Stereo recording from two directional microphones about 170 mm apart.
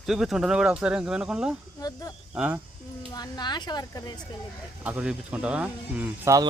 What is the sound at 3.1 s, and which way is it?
Speech, 25° left (ahead or behind).